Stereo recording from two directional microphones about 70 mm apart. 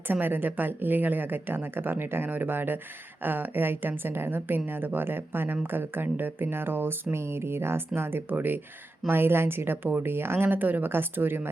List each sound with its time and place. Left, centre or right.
0.1 s a woman's voice: right